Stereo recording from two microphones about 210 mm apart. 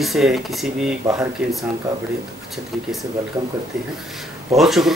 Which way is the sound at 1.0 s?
15° right (ahead or behind).